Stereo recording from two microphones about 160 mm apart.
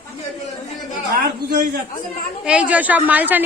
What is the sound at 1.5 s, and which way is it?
Speech, 55° right (ahead or behind).